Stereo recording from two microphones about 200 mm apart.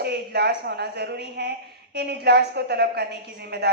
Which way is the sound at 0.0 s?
55° right (ahead or behind).